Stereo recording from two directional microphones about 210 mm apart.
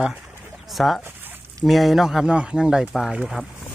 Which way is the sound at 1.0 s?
10° right (ahead or behind).